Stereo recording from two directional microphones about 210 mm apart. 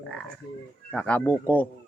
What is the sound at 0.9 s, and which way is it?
Speech, 5° left (ahead or behind).